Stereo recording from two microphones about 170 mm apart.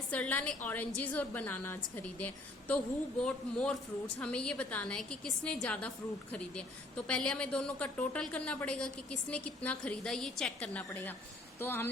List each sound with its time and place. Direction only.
0.1 s a woman's voice: 10° left (ahead or behind)